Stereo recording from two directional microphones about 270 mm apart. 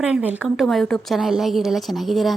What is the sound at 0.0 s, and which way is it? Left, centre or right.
A woman's voice, centre.